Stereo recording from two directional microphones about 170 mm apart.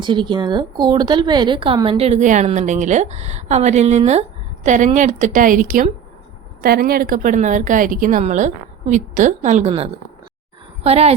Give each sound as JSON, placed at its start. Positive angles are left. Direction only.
{"t": 0.0, "sound": "a woman's voice", "side_deg": -25}